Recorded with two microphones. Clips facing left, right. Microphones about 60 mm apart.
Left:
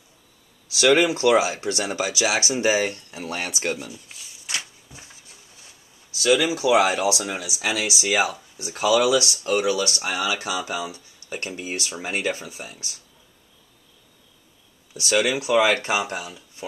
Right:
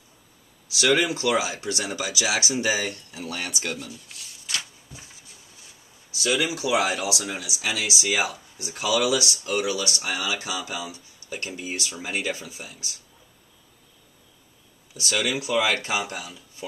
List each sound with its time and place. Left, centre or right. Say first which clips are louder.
0.7 s speech: left 4 dB; left
3.2 s speech: left 3 dB; left
3.7 s a sound: left 2 dB; centre
4.5 s a sound: left 1 dB; left
6.6 s speech: left 5 dB; left
15.0 s speech: left 5 dB; left
15.3 s speech: left 4 dB; left
15.9 s speech: left 3 dB; left